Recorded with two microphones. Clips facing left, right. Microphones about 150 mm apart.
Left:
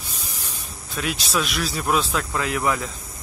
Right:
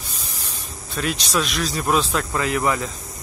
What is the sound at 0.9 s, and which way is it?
Speech, centre (ahead or behind).